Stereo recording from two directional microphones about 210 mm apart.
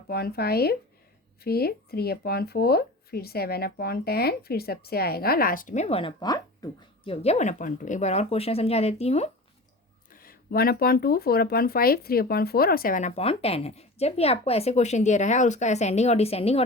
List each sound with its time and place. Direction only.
0.1 s speech: 45° left (ahead or behind); by 9.3 s 30° left (ahead or behind)
10.1 s speech: 45° left (ahead or behind)